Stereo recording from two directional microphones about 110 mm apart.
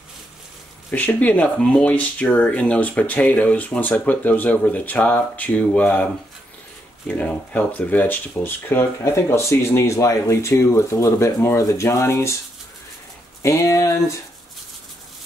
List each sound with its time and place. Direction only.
0.9 s speech: 15° left (ahead or behind)
7.1 s speech: 15° left (ahead or behind)
13.4 s speech: 25° left (ahead or behind)